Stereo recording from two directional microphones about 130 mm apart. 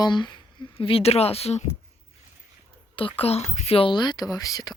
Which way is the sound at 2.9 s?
45° left (ahead or behind).